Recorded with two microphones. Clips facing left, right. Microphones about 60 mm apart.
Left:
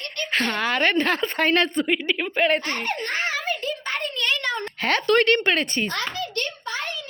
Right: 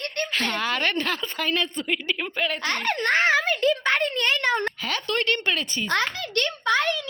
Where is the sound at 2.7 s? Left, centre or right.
Right.